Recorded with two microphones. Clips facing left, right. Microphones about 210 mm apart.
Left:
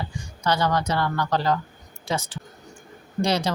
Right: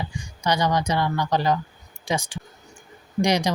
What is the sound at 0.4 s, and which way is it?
Speech, 15° right (ahead or behind).